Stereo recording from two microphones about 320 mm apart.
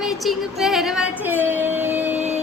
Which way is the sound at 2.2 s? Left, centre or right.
Right.